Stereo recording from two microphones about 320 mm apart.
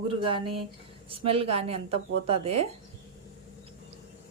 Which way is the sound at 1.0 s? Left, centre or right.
Centre.